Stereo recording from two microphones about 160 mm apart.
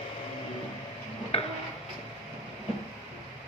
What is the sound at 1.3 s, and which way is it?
Tick-tock, 40° left (ahead or behind).